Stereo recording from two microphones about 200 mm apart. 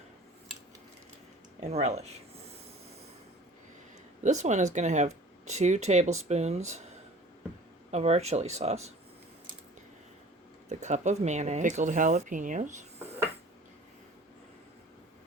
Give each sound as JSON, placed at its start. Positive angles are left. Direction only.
{"t": 1.6, "sound": "speech", "side_deg": -35}
{"t": 4.2, "sound": "speech", "side_deg": -35}
{"t": 7.9, "sound": "speech", "side_deg": -35}
{"t": 10.7, "sound": "speech", "side_deg": -35}